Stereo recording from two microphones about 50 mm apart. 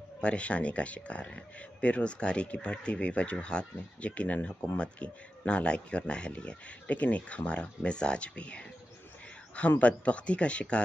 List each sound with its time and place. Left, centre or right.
0.2 s speech: left